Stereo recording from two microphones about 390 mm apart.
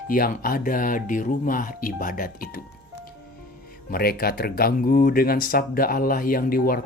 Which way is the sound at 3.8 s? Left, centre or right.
Left.